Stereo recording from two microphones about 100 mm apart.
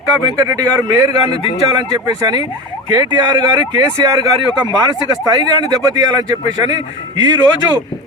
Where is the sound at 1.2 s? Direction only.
65° left (ahead or behind).